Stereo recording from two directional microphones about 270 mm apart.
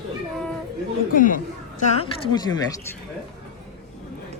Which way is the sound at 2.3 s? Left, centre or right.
Centre.